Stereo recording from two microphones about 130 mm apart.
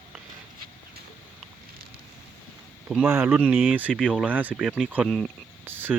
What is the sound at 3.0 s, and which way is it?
Speech, 15° right (ahead or behind).